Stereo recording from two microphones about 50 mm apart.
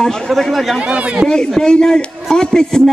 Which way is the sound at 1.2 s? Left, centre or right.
Centre.